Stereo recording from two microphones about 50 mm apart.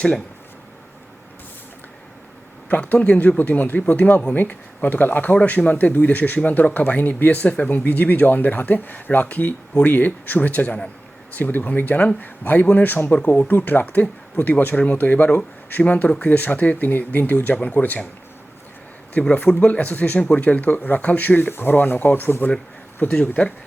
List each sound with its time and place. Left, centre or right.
2.6 s speech: left
19.3 s speech: left